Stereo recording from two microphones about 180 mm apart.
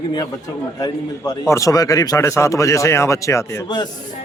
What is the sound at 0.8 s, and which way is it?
A man's voice, 20° left (ahead or behind).